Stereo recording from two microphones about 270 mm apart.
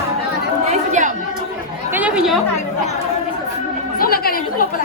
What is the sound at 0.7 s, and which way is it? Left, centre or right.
Chatter, right.